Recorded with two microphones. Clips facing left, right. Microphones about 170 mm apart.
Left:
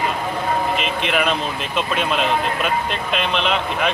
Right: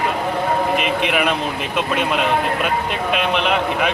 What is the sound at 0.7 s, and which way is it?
Speech, 60° right (ahead or behind).